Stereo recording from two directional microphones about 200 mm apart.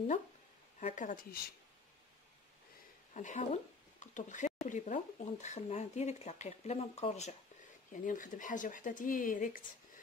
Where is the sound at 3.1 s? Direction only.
35° left (ahead or behind).